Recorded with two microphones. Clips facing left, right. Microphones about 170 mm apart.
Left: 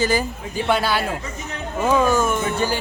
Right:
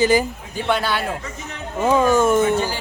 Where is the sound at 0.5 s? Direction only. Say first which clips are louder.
Left 1 dB; 5° left (ahead or behind).